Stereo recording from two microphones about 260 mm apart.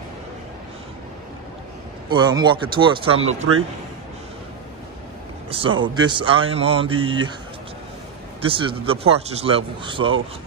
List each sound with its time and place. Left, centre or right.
2.0 s speech: centre
5.5 s speech: centre
8.5 s speech: right